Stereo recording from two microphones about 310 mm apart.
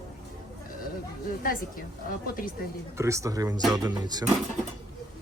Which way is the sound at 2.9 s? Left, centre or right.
Centre.